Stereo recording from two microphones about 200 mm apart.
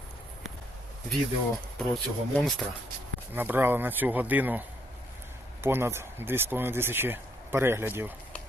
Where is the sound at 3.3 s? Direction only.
10° right (ahead or behind).